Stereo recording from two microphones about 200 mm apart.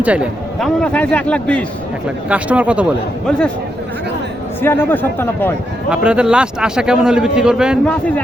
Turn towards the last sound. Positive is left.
turn(degrees=-5)  # may be behind; listen again after turning